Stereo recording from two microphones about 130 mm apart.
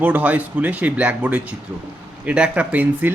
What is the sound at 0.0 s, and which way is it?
Speech, 10° right (ahead or behind).